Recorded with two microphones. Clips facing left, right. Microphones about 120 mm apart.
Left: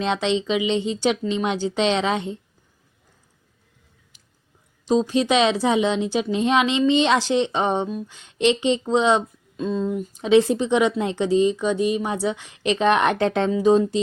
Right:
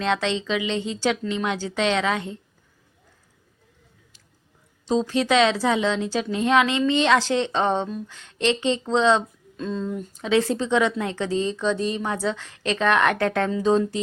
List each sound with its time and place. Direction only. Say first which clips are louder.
0.0 s speech: left 2 dB; 20° left (ahead or behind)
4.9 s a woman's voice: left 2 dB; 20° left (ahead or behind)